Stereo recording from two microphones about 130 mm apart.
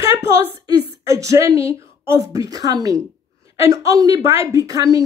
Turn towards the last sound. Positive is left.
turn(degrees=-25)  # may be behind; listen again after turning